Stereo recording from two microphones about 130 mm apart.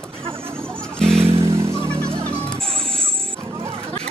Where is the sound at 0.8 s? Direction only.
5° left (ahead or behind).